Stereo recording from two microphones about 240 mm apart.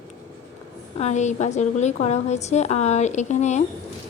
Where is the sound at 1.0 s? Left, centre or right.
Left.